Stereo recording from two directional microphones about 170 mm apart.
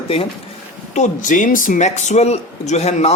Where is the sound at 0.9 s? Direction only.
45° left (ahead or behind).